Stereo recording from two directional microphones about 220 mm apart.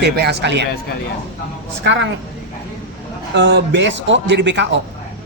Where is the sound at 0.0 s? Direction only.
50° right (ahead or behind).